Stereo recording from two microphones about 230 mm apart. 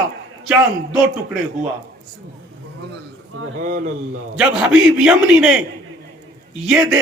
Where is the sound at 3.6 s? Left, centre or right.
Right.